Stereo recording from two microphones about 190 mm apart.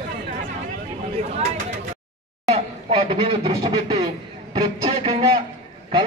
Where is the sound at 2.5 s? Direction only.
30° right (ahead or behind).